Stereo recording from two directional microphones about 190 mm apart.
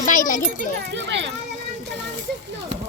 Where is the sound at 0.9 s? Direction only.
70° right (ahead or behind).